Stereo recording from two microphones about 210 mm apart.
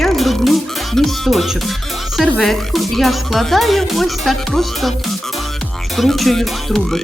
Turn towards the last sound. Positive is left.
turn(degrees=0)  # may be behind; listen again after turning